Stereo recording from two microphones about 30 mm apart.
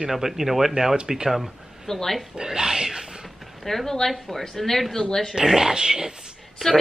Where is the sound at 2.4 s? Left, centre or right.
Centre.